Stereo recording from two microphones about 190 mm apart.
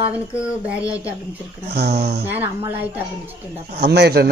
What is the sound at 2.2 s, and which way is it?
Speech, 10° right (ahead or behind).